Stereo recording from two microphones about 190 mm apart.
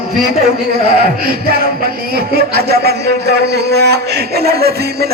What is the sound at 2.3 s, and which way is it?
Speech, 55° right (ahead or behind).